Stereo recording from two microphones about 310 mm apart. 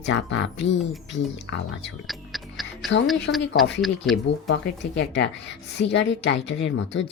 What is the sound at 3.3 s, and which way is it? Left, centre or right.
Speech, left.